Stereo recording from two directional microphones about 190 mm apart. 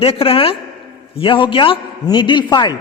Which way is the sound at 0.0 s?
30° left (ahead or behind).